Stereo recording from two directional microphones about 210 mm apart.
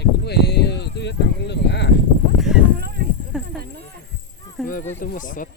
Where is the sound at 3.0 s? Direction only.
45° right (ahead or behind).